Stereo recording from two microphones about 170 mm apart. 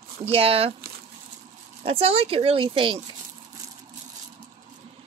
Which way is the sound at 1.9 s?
35° right (ahead or behind).